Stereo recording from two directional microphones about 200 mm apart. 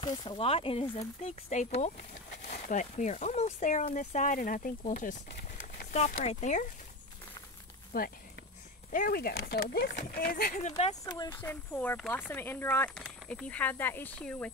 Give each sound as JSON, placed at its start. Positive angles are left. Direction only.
{"t": 0.0, "sound": "speech", "side_deg": 20}
{"t": 7.9, "sound": "speech", "side_deg": 50}
{"t": 11.1, "sound": "speech", "side_deg": 20}
{"t": 11.4, "sound": "speech", "side_deg": 10}